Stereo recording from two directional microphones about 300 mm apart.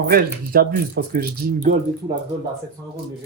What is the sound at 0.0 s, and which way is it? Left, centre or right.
Speech, right.